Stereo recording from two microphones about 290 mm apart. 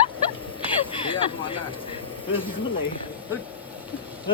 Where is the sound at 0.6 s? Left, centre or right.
Centre.